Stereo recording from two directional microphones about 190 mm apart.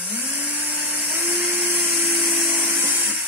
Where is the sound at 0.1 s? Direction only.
10° right (ahead or behind).